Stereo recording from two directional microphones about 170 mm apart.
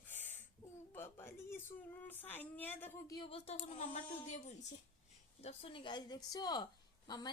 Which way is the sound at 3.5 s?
45° left (ahead or behind).